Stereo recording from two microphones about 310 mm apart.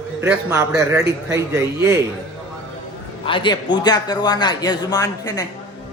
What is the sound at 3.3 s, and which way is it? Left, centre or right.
A man's voice, centre.